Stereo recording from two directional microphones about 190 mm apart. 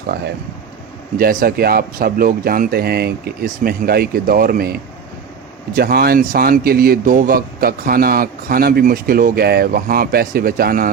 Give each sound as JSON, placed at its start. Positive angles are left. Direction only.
{"t": 1.2, "sound": "speech", "side_deg": -50}